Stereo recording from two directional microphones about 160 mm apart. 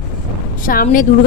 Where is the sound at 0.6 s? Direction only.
60° left (ahead or behind).